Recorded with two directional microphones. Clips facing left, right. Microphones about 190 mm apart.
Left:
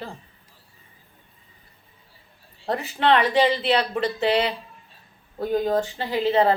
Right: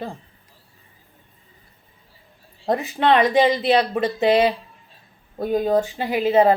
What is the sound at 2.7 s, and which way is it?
Speech, 15° right (ahead or behind).